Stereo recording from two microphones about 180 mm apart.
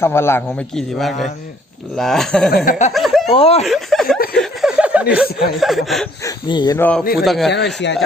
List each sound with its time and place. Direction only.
0.0 s a man's voice: 15° left (ahead or behind)
0.8 s speech: centre (ahead or behind)
2.6 s speech: 40° left (ahead or behind)
2.9 s speech: centre (ahead or behind)
3.3 s speech: 35° left (ahead or behind)
3.7 s speech: centre (ahead or behind)
4.4 s chuckle: 5° right (ahead or behind)
5.5 s speech: centre (ahead or behind)
6.2 s speech: 20° left (ahead or behind)
6.7 s a man's voice: 10° left (ahead or behind)
7.0 s a man's voice: 55° left (ahead or behind)
7.3 s speech: centre (ahead or behind)
7.5 s speech: 75° left (ahead or behind)